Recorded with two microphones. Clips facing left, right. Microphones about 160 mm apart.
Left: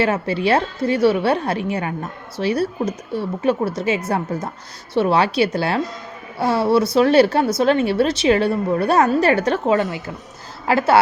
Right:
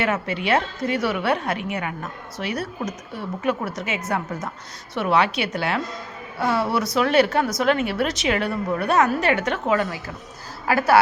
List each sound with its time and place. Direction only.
0.0 s a woman's voice: 30° left (ahead or behind)